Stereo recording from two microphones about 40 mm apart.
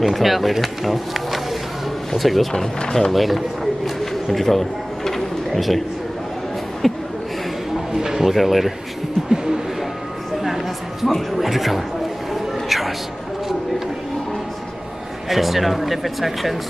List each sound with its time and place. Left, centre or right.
0.0 s speech: centre
2.5 s speech: centre
3.1 s a sound: centre
6.8 s a sound: centre
7.9 s speech: centre
9.3 s music: centre
10.4 s a sound: centre
11.1 s speech: centre
12.4 s music: centre
15.2 s speech: centre